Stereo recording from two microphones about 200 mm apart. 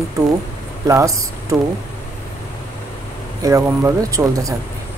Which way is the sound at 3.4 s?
15° right (ahead or behind).